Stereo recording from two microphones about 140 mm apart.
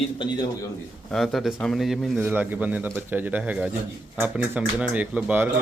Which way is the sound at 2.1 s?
15° right (ahead or behind).